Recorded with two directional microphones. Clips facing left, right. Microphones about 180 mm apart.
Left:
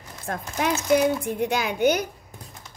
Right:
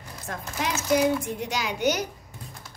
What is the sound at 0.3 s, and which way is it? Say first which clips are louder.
A woman's voice: left 5 dB; 50° left (ahead or behind).